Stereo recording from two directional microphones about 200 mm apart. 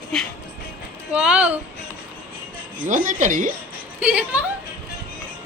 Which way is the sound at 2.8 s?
40° right (ahead or behind).